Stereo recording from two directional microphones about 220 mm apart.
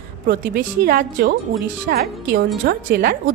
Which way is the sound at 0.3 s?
45° right (ahead or behind).